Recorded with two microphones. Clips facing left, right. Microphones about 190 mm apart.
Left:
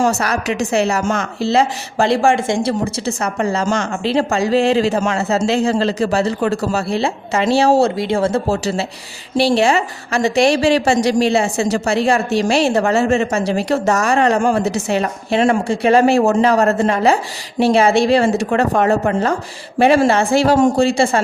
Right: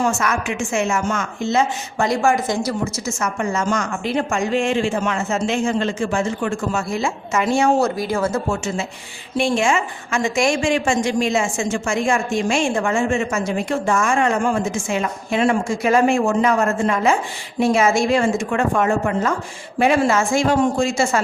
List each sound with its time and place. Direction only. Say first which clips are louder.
0.0 s a woman's voice: left 3 dB; 35° left (ahead or behind)